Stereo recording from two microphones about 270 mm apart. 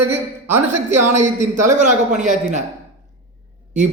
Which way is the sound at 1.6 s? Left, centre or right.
Right.